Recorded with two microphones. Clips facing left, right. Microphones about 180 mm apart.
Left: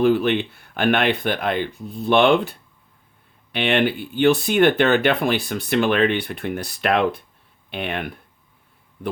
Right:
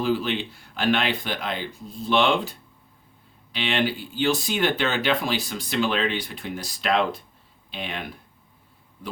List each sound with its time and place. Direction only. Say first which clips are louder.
0.0 s speech: left 7 dB; 60° left (ahead or behind)